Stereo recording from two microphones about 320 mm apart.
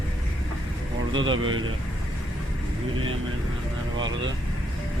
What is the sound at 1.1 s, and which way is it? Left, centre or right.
Speech, right.